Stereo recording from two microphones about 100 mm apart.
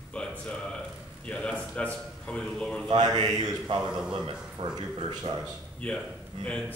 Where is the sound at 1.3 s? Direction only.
10° left (ahead or behind).